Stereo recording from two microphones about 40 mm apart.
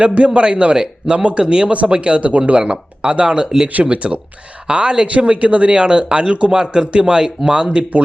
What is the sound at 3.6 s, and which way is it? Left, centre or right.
A man's voice, right.